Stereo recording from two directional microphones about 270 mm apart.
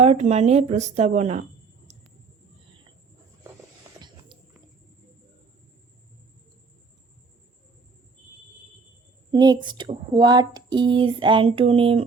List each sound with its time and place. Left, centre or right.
0.0 s a woman's voice: right
9.3 s a woman's voice: centre